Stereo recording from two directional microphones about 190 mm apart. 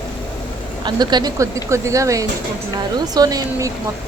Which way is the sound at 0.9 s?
20° right (ahead or behind).